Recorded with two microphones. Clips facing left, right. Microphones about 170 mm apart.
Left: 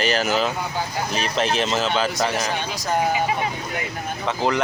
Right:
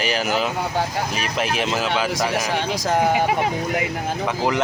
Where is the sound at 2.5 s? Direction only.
85° right.